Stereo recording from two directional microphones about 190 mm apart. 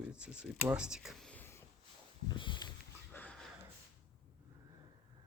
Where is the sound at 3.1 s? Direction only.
5° left (ahead or behind).